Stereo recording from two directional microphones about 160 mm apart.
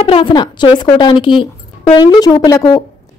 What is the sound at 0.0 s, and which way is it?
A woman's voice, 35° left (ahead or behind).